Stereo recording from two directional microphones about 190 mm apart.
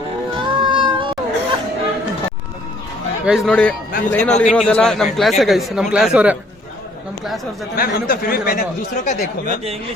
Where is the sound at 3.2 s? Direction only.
Centre (ahead or behind).